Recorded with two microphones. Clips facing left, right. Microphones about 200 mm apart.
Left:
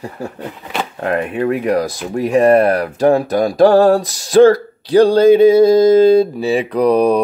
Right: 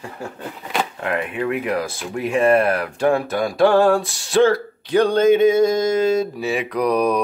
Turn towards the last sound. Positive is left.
turn(degrees=30)  # may be behind; listen again after turning